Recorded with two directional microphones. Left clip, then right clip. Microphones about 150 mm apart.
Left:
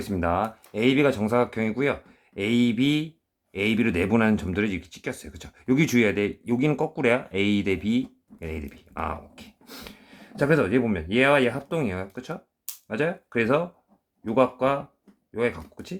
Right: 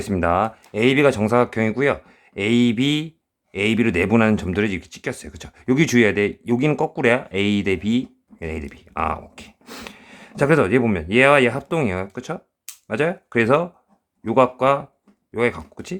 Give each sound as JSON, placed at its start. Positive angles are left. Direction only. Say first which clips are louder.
{"t": 0.0, "sound": "speech", "louder": "right 6 dB", "side_deg": -35}